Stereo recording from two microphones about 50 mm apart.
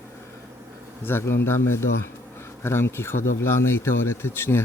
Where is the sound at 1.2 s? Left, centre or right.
Left.